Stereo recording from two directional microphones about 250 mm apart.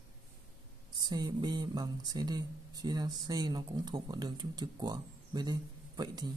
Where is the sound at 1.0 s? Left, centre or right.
Centre.